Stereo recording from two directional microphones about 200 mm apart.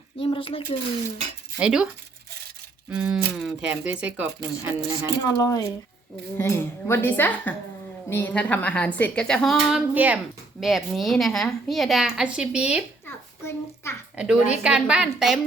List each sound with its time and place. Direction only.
0.2 s speech: 25° left (ahead or behind)
1.5 s a woman's voice: 5° right (ahead or behind)
3.3 s speech: 5° right (ahead or behind)
5.2 s a woman's voice: 15° left (ahead or behind); by 12.8 s 5° right (ahead or behind)
13.1 s a sound: 15° left (ahead or behind)
14.2 s a woman's voice: 5° right (ahead or behind)